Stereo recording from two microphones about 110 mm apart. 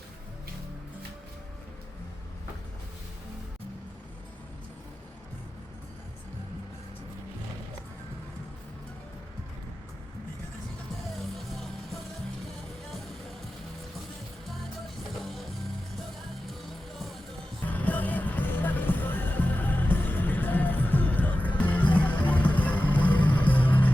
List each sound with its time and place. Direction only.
11.2 s music: centre (ahead or behind)
15.1 s music: centre (ahead or behind)
17.7 s music: 15° left (ahead or behind)